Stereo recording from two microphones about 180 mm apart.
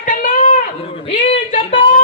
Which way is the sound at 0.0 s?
45° left (ahead or behind).